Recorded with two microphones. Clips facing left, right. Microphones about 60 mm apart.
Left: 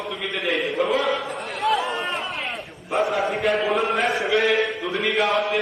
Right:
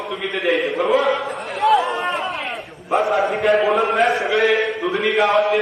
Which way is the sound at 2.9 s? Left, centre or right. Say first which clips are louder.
Right 4 dB; centre.